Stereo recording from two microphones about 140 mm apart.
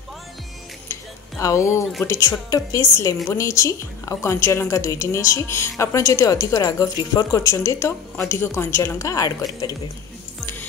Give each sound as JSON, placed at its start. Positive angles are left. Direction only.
{"t": 1.4, "sound": "a woman's voice", "side_deg": 20}